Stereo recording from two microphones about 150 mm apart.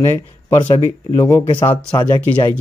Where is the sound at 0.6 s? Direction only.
30° left (ahead or behind).